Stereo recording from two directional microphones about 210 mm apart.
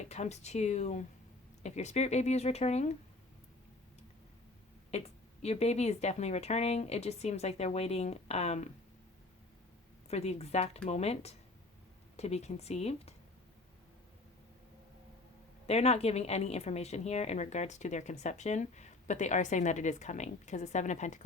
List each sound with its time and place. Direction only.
0.0 s a woman's voice: 30° left (ahead or behind)
4.9 s a woman's voice: 30° left (ahead or behind)
10.1 s a woman's voice: 30° left (ahead or behind)
15.6 s a woman's voice: 30° left (ahead or behind)